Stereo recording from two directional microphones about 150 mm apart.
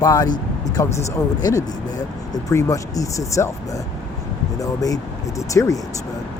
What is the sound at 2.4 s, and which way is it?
Speech, 20° left (ahead or behind).